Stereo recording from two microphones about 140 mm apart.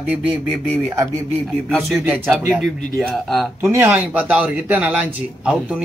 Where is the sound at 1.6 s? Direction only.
Centre (ahead or behind).